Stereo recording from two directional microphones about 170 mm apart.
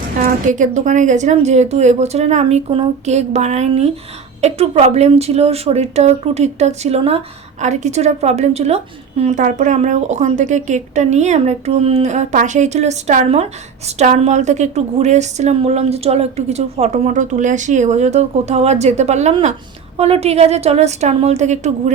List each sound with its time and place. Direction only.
0.2 s a woman's voice: 50° right (ahead or behind)